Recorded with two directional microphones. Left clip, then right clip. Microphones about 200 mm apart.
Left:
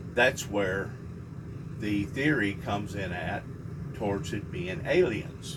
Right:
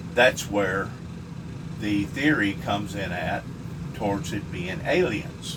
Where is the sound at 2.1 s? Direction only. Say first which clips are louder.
Right 4 dB; 25° right (ahead or behind).